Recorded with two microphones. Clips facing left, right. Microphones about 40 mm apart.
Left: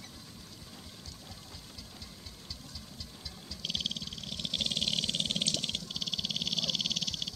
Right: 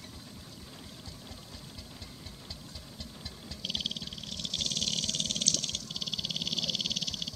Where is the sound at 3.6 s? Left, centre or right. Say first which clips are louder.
Even; centre.